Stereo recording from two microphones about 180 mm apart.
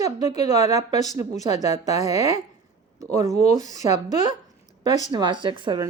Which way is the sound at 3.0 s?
20° right (ahead or behind).